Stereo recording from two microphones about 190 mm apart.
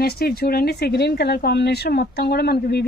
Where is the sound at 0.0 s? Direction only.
55° left (ahead or behind).